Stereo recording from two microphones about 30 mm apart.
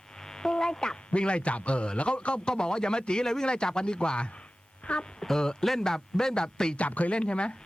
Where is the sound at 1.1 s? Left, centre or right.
Left.